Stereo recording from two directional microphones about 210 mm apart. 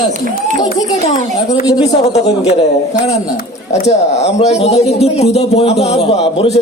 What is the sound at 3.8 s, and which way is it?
A man's voice, 30° left (ahead or behind).